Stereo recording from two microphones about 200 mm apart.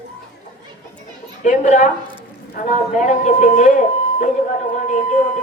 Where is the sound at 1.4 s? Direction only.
40° left (ahead or behind).